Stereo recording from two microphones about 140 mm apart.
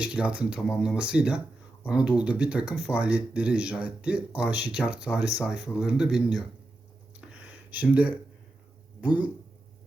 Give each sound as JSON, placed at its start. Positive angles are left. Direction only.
{"t": 0.0, "sound": "speech", "side_deg": -5}
{"t": 7.8, "sound": "speech", "side_deg": -10}